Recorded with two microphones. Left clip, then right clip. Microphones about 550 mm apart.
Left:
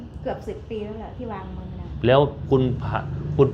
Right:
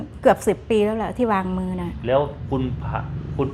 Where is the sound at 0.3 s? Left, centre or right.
Right.